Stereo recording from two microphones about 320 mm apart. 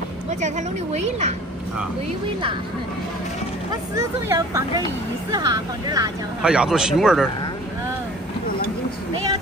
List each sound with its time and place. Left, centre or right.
0.3 s a woman's voice: right
3.7 s speech: centre